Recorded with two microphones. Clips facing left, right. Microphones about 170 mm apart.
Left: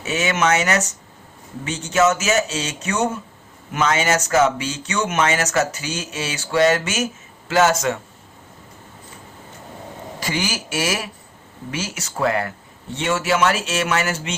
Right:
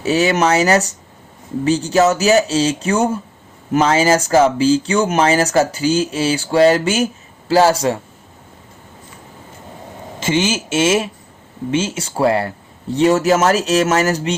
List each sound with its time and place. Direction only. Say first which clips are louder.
0.0 s speech: right 6 dB; 35° right (ahead or behind)
10.2 s speech: right 8 dB; 25° right (ahead or behind)